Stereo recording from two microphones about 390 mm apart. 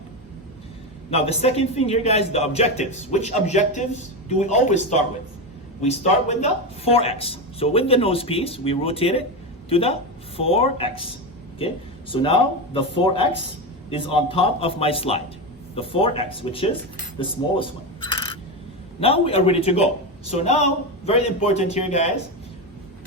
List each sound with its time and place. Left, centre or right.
1.1 s speech: centre
12.1 s speech: centre